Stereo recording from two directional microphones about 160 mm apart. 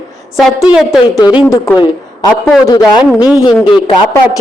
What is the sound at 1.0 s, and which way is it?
Speech, 25° left (ahead or behind).